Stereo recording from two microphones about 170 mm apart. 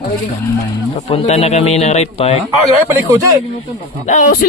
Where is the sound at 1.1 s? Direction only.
35° left (ahead or behind).